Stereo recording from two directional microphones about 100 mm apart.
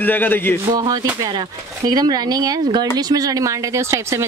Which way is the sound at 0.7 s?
45° right (ahead or behind).